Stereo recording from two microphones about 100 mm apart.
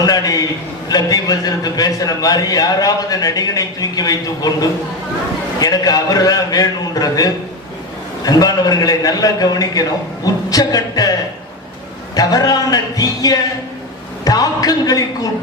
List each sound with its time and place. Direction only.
0.0 s a man's voice: 40° left (ahead or behind)
5.5 s a man's voice: 40° left (ahead or behind)
12.1 s a man's voice: 40° left (ahead or behind)